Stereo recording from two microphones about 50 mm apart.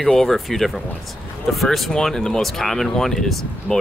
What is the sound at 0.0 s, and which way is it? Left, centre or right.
Speech, centre.